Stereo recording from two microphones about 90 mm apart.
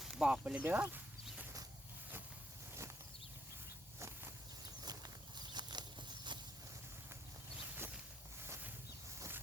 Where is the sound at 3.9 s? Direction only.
30° right (ahead or behind).